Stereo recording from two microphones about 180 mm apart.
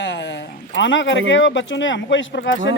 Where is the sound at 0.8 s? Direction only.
90° left.